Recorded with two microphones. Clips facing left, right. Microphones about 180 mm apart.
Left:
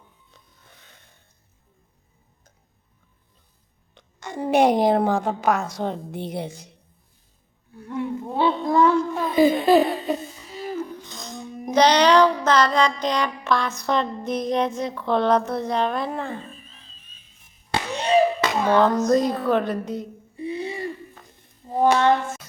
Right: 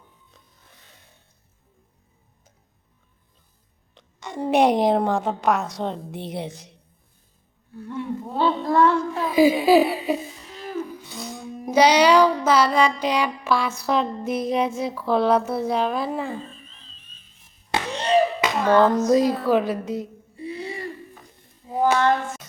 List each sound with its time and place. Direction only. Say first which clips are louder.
3.9 s a woman's voice: even; centre (ahead or behind)
7.9 s child singing: left 2 dB; 15° left (ahead or behind)
9.1 s speech: right 1 dB; 5° right (ahead or behind)
10.8 s music: right 2 dB; 10° right (ahead or behind)
17.9 s a sound: left 1 dB; 10° left (ahead or behind)
18.8 s a woman's voice: right 1 dB; 5° right (ahead or behind)
20.3 s a sound: left 3 dB; 20° left (ahead or behind)
21.7 s female singing: left 2 dB; 5° right (ahead or behind)
21.9 s a sound: left 1 dB; 25° left (ahead or behind)